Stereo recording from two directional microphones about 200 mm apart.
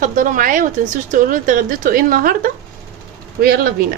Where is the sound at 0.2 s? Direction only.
40° right (ahead or behind).